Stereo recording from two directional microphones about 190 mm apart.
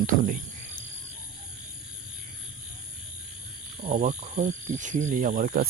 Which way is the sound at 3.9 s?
40° right (ahead or behind).